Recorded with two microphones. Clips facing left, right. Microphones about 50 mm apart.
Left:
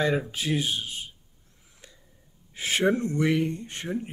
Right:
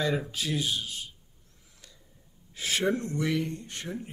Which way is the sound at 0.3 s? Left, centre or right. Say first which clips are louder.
Left 3 dB; left.